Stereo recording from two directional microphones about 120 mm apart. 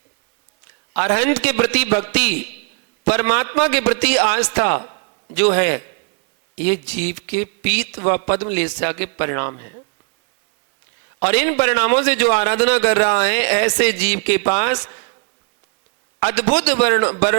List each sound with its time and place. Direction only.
0.9 s speech: 25° left (ahead or behind)
11.2 s speech: 25° left (ahead or behind)
16.2 s speech: 20° left (ahead or behind)